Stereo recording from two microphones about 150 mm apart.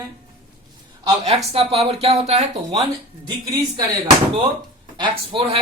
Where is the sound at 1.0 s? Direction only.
40° right (ahead or behind).